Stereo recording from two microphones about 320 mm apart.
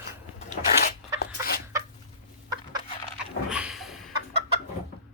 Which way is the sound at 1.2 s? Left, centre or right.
Left.